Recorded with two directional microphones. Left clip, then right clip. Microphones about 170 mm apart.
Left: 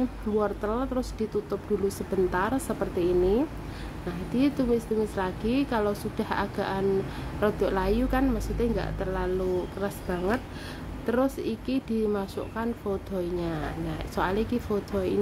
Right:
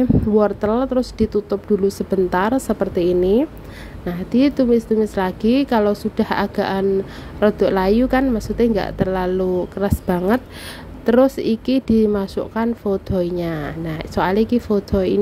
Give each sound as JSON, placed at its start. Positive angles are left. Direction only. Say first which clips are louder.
{"t": 0.4, "sound": "a woman's voice", "louder": "right 9 dB", "side_deg": -40}